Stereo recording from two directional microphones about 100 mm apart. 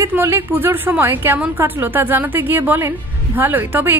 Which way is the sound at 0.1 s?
25° right (ahead or behind).